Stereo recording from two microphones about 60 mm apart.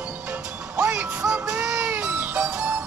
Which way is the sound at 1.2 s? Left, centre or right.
Centre.